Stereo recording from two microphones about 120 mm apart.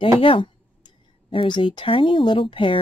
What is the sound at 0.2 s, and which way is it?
Speech, 45° left (ahead or behind).